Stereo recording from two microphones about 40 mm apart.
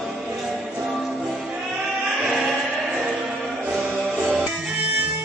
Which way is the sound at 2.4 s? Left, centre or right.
Centre.